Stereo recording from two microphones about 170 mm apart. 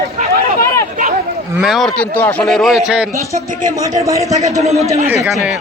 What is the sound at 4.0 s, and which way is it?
Speech, 20° right (ahead or behind).